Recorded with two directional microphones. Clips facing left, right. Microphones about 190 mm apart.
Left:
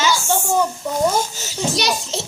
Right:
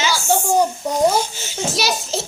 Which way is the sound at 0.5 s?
40° right (ahead or behind).